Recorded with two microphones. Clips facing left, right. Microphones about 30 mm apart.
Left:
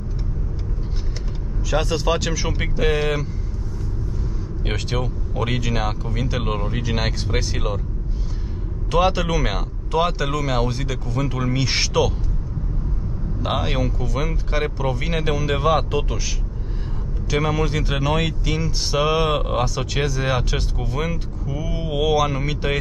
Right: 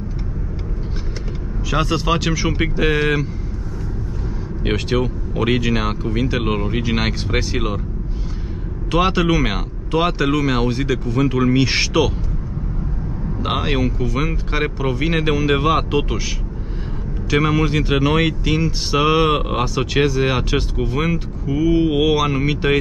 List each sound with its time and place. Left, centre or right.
1.7 s speech: centre
4.6 s speech: centre
8.9 s speech: centre
13.4 s speech: centre
17.3 s speech: centre